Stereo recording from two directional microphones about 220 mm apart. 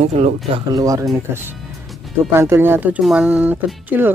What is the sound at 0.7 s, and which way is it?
Speech, 15° right (ahead or behind).